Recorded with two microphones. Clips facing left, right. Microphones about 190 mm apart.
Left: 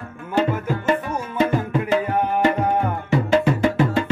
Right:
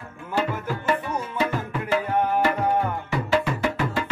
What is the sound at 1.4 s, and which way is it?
Music, 25° left (ahead or behind).